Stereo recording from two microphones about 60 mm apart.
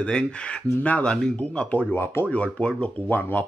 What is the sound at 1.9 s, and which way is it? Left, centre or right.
Speech, left.